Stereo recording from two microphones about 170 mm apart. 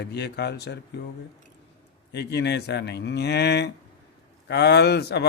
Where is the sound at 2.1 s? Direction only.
80° left.